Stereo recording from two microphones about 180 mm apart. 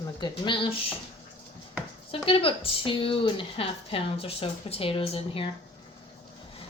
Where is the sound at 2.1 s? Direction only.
30° left (ahead or behind).